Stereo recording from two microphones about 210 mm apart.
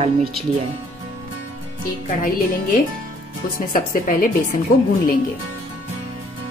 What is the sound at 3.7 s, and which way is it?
Speech, 40° left (ahead or behind).